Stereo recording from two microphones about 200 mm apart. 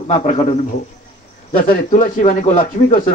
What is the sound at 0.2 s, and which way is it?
Speech, 35° left (ahead or behind).